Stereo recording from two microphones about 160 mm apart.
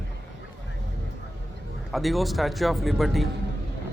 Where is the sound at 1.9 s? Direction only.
Centre (ahead or behind).